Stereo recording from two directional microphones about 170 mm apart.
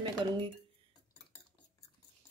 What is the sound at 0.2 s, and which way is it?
Speech, 25° right (ahead or behind).